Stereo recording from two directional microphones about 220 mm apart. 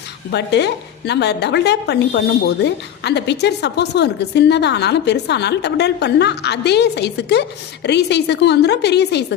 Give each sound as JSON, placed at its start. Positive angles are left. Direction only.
{"t": 0.3, "sound": "a woman's voice", "side_deg": 50}